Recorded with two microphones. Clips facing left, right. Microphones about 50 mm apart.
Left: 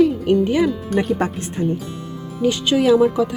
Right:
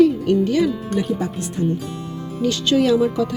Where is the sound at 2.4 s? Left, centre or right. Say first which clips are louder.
Even; centre.